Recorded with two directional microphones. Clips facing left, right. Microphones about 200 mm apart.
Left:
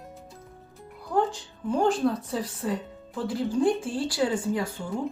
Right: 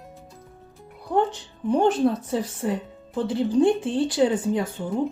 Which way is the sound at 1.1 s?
25° right (ahead or behind).